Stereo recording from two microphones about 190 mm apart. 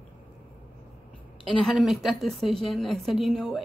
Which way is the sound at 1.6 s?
Centre (ahead or behind).